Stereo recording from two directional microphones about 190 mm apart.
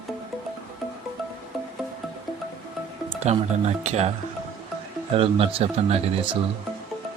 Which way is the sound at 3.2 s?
35° right (ahead or behind).